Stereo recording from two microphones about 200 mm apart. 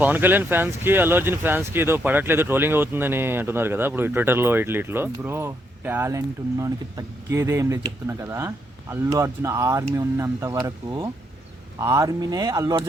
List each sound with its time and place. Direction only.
0.0 s speech: 10° right (ahead or behind)